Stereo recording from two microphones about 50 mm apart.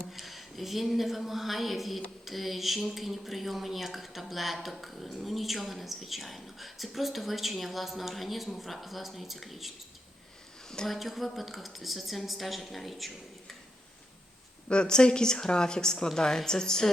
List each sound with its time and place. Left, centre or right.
0.0 s speech: centre
10.8 s speech: centre
14.7 s a woman's voice: centre